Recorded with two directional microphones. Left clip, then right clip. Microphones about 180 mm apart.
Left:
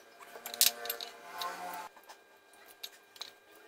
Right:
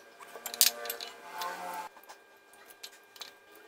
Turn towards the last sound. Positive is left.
turn(degrees=0)  # may be behind; listen again after turning